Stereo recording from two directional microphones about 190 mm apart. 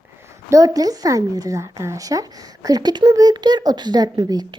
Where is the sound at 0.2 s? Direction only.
15° right (ahead or behind).